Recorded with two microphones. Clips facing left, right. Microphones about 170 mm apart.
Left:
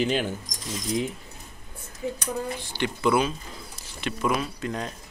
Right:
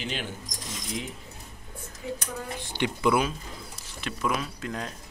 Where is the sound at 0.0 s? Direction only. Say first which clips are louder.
Left 10 dB; 40° left (ahead or behind).